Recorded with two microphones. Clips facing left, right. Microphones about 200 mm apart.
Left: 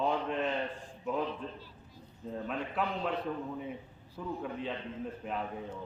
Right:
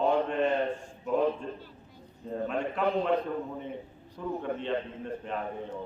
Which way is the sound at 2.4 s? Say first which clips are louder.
Right 6 dB; centre (ahead or behind).